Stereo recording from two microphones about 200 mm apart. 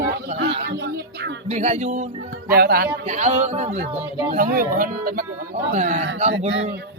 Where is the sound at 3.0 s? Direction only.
35° right (ahead or behind).